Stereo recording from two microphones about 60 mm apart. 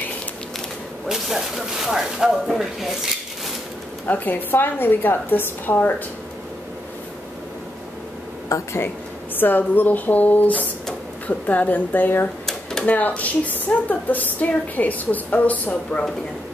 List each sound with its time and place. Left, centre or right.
1.0 s speech: centre
4.1 s a woman's voice: left
8.5 s speech: left
9.4 s speech: left